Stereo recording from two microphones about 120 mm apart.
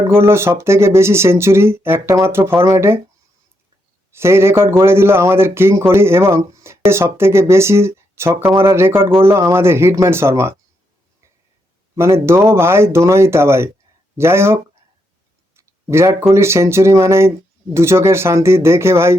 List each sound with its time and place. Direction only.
0.2 s speech: 20° right (ahead or behind)
4.1 s speech: 20° right (ahead or behind)
11.9 s speech: 20° right (ahead or behind)
15.5 s tick-tock: 20° right (ahead or behind)
16.3 s speech: 20° right (ahead or behind)